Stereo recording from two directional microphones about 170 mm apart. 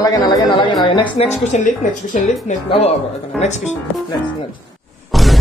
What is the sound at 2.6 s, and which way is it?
Speech, 35° left (ahead or behind).